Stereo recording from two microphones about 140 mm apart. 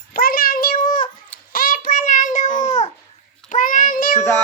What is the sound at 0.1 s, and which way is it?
Cat, 90° left.